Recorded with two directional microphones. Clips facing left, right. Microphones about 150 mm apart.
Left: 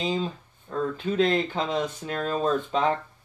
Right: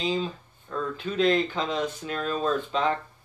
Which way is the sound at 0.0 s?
45° left (ahead or behind).